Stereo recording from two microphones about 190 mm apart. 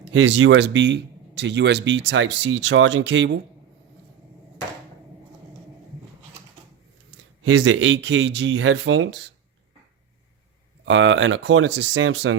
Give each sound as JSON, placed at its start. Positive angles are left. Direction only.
{"t": 0.1, "sound": "speech", "side_deg": -80}
{"t": 7.5, "sound": "speech", "side_deg": -80}
{"t": 10.8, "sound": "speech", "side_deg": -70}